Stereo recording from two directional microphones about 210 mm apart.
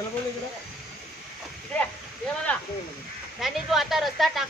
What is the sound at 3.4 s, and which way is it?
Speech, centre (ahead or behind).